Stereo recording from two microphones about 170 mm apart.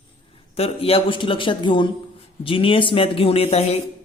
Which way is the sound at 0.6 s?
35° left (ahead or behind).